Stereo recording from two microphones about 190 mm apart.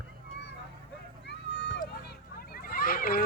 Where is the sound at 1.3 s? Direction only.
60° left (ahead or behind).